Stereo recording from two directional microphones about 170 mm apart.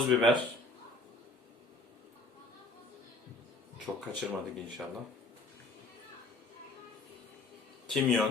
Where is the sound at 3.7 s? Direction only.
5° right (ahead or behind).